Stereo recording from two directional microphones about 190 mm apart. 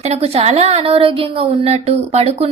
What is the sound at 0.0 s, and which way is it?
A woman's voice, 35° right (ahead or behind).